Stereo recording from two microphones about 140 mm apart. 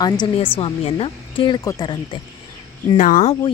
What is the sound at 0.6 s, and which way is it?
A woman's voice, 45° left (ahead or behind).